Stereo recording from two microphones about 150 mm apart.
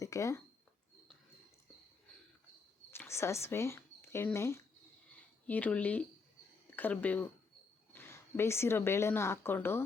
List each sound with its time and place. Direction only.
0.0 s speech: 20° left (ahead or behind)
2.9 s speech: 15° left (ahead or behind)